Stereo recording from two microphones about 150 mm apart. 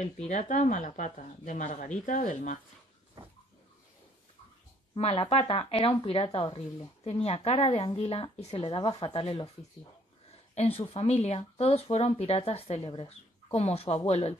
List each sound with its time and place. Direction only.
0.0 s speech: 50° left (ahead or behind)
4.9 s speech: 40° left (ahead or behind)
10.5 s speech: 40° left (ahead or behind)